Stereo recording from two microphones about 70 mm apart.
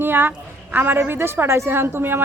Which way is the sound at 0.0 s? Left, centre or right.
Right.